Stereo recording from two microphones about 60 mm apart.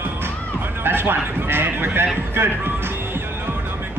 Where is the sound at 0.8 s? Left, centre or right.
Right.